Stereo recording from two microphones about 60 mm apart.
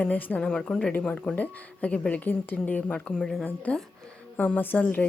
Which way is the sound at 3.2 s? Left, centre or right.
Centre.